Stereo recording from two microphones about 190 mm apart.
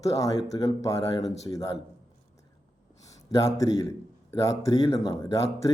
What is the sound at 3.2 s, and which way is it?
A man's voice, 20° left (ahead or behind).